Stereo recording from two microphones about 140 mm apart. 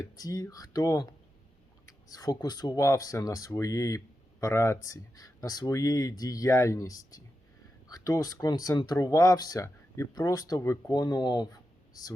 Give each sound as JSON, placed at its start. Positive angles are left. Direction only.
{"t": 0.0, "sound": "speech", "side_deg": 25}